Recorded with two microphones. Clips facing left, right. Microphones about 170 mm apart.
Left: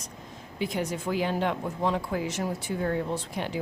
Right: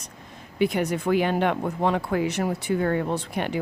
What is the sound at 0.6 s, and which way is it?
Speech, 65° right (ahead or behind).